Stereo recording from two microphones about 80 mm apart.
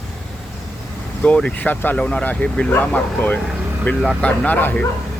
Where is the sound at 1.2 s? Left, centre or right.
Centre.